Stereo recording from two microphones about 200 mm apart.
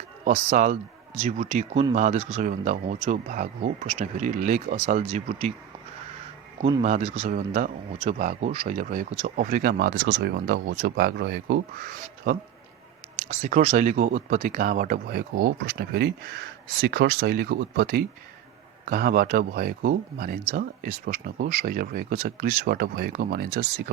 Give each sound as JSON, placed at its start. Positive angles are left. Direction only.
{"t": 0.3, "sound": "speech", "side_deg": -35}
{"t": 6.6, "sound": "speech", "side_deg": -30}